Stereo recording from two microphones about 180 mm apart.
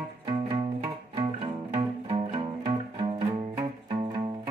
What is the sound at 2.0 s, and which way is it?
Music, 30° right (ahead or behind).